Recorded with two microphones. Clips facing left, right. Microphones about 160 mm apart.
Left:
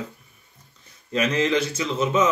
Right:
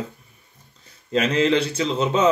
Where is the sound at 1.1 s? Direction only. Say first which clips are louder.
Right 3 dB; 30° right (ahead or behind).